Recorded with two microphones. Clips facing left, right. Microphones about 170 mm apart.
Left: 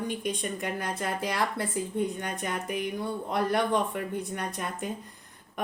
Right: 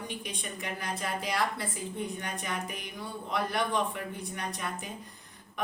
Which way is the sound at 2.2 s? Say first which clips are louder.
Left 3 dB; 50° left (ahead or behind).